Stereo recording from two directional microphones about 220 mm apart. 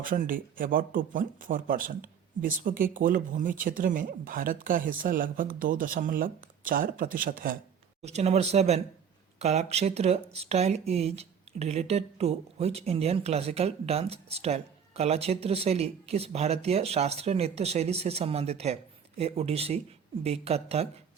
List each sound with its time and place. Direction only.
0.0 s speech: 40° right (ahead or behind)
8.0 s speech: 30° right (ahead or behind)